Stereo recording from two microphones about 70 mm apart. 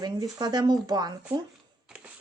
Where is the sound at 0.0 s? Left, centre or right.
Right.